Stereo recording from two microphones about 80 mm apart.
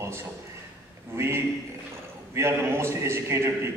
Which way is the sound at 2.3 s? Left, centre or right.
Right.